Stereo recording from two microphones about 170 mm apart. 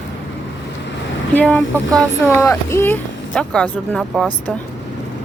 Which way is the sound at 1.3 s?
10° left (ahead or behind).